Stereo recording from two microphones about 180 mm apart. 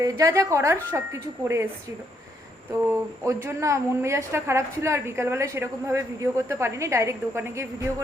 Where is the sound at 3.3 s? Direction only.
15° right (ahead or behind).